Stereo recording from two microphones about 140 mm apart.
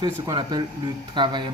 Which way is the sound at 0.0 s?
30° right (ahead or behind).